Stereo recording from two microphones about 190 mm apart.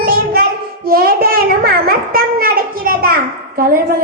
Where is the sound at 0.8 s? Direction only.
50° right (ahead or behind).